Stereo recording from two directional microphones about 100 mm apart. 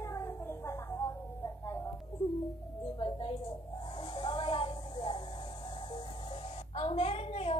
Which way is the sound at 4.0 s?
55° left (ahead or behind).